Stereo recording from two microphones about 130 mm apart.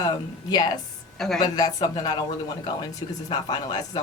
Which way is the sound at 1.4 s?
30° left (ahead or behind).